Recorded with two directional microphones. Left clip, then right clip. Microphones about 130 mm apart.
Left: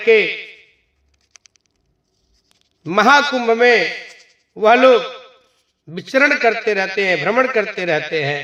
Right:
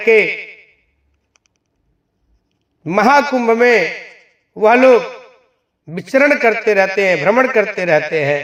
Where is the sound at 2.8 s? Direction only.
35° right (ahead or behind).